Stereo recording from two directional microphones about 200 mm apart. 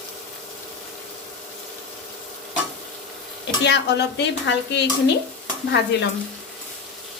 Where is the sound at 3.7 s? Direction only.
55° left (ahead or behind).